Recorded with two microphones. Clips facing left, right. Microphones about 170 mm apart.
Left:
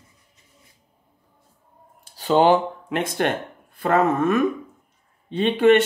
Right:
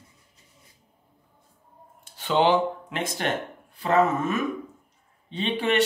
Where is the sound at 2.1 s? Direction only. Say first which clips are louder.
Left 4 dB; 40° left (ahead or behind); by 4.4 s 55° left (ahead or behind).